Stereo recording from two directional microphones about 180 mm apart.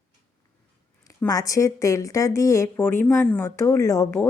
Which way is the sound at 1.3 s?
20° left (ahead or behind).